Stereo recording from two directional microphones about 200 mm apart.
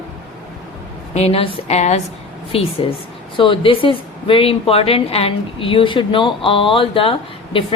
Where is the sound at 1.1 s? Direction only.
30° left (ahead or behind).